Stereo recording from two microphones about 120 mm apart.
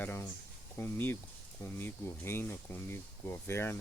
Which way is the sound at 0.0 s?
20° left (ahead or behind).